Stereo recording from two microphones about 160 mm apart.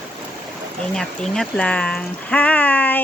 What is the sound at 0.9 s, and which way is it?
Speech, 5° left (ahead or behind).